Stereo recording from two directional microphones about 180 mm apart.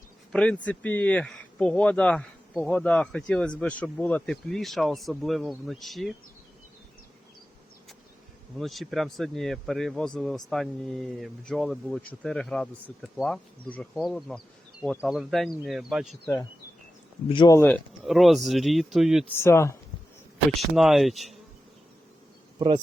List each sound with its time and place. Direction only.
0.3 s speech: 5° left (ahead or behind)
8.5 s speech: centre (ahead or behind)
16.2 s speech: 20° left (ahead or behind)
17.6 s speech: 5° left (ahead or behind)
19.3 s speech: 15° left (ahead or behind)
20.5 s speech: centre (ahead or behind)
22.5 s speech: 25° right (ahead or behind)